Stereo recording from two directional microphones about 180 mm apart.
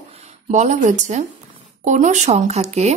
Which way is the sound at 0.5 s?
40° right (ahead or behind).